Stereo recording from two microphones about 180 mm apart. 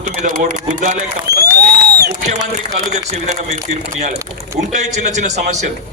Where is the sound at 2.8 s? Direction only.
40° right (ahead or behind).